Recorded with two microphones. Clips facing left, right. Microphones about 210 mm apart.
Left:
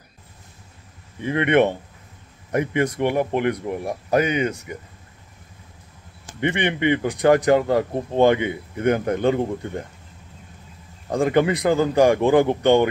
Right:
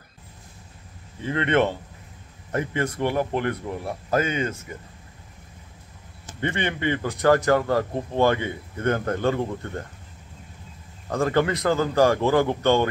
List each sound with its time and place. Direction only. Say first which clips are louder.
1.2 s speech: left 4 dB; 15° left (ahead or behind)
6.4 s speech: left 4 dB; 15° left (ahead or behind)
11.1 s speech: left 3 dB; 15° left (ahead or behind)